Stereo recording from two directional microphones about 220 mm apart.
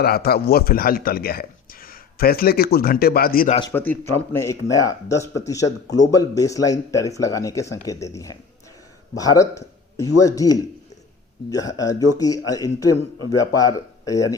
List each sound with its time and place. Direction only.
0.0 s speech: 45° left (ahead or behind)
3.7 s speech: 10° left (ahead or behind)